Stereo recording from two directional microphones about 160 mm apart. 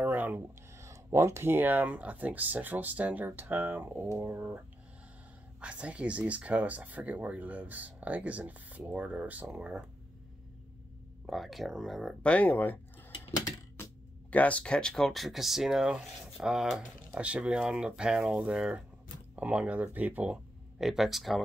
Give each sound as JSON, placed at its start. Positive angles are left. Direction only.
{"t": 0.0, "sound": "speech", "side_deg": -10}
{"t": 5.6, "sound": "speech", "side_deg": -5}
{"t": 11.2, "sound": "speech", "side_deg": 0}
{"t": 13.2, "sound": "a sound", "side_deg": 20}
{"t": 14.3, "sound": "speech", "side_deg": 10}